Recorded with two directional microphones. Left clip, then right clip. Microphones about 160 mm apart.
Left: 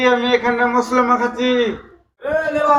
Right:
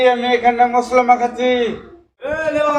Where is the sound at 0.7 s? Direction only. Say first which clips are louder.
Right 3 dB; 20° right (ahead or behind).